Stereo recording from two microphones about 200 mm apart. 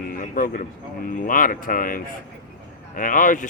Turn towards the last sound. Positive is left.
turn(degrees=40)  # may be behind; listen again after turning